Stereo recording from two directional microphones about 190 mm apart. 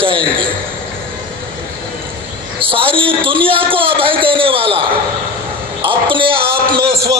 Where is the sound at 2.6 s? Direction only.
30° right (ahead or behind).